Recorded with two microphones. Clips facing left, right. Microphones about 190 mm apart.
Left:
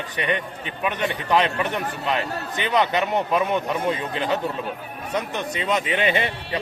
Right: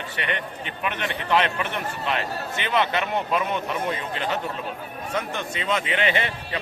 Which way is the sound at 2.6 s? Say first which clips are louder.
Left 3 dB; 15° left (ahead or behind).